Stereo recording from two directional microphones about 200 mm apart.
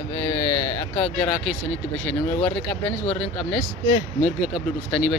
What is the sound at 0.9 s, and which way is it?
Speech, 5° left (ahead or behind).